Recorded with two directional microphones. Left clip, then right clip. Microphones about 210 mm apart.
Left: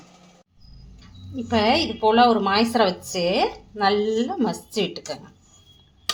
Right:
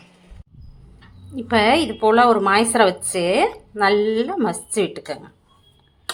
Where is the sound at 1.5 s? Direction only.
20° right (ahead or behind).